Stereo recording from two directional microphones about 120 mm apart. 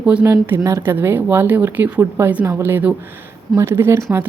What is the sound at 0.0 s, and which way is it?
Speech, 10° right (ahead or behind).